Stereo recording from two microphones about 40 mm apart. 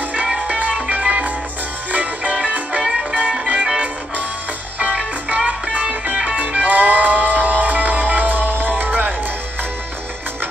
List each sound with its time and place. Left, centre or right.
0.5 s music: right
2.8 s music: centre
4.7 s music: right